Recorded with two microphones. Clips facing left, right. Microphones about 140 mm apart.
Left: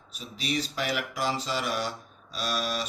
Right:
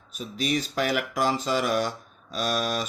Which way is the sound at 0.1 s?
45° right (ahead or behind).